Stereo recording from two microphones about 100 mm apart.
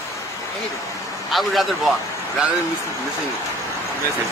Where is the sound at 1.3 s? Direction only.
Centre (ahead or behind).